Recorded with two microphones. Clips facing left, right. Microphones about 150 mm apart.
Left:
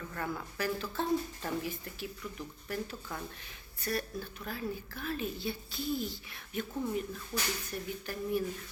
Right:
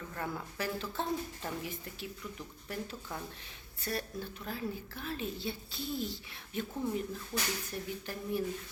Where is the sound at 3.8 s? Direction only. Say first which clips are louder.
Left 2 dB; 25° right (ahead or behind).